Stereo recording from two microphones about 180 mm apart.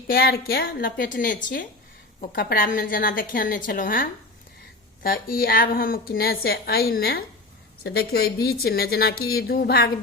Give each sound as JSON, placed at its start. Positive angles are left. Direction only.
{"t": 0.1, "sound": "a woman's voice", "side_deg": 55}